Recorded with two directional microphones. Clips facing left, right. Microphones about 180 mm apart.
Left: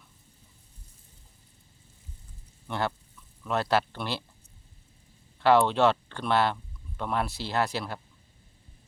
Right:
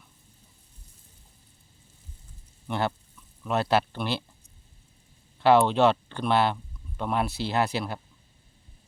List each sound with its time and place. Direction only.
2.6 s speech: 25° right (ahead or behind)
5.4 s speech: 25° right (ahead or behind)